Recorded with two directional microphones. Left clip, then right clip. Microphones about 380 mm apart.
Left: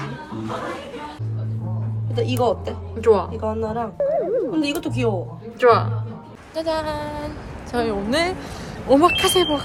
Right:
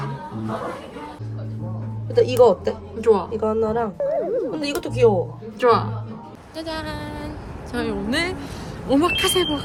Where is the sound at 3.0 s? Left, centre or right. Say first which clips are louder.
Left 1 dB; centre.